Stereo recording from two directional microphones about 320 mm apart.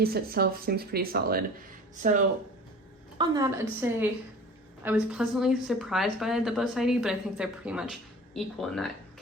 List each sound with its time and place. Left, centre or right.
0.0 s speech: right
3.2 s a woman's voice: centre